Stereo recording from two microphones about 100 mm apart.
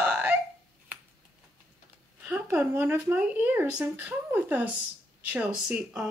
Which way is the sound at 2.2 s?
15° right (ahead or behind).